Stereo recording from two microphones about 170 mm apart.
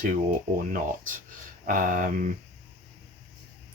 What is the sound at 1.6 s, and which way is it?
Speech, 55° right (ahead or behind).